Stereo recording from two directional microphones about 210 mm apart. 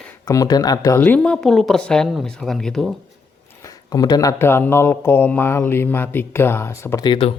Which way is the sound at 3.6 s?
15° left (ahead or behind).